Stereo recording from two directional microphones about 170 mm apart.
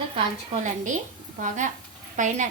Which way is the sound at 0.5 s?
45° right (ahead or behind).